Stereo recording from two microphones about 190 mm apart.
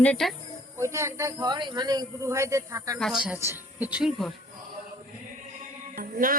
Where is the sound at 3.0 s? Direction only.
5° right (ahead or behind).